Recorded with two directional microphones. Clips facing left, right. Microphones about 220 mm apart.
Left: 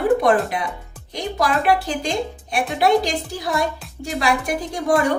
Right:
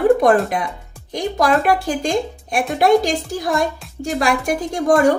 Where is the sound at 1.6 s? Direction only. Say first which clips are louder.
Right 2 dB; 50° right (ahead or behind).